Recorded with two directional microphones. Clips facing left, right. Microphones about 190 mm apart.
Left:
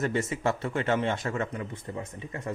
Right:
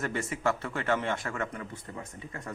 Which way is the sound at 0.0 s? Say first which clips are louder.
Left 3 dB; 20° left (ahead or behind).